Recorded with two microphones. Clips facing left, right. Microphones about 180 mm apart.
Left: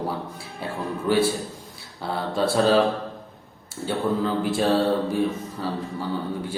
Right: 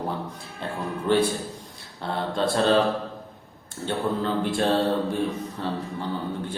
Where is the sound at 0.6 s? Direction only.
5° left (ahead or behind).